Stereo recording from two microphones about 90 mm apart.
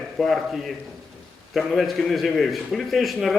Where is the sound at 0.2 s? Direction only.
Centre (ahead or behind).